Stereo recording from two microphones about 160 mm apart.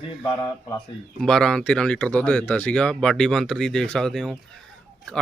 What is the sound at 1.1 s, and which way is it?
Speech, 5° left (ahead or behind).